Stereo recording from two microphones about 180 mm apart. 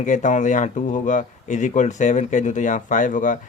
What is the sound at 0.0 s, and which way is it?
Speech, 45° left (ahead or behind).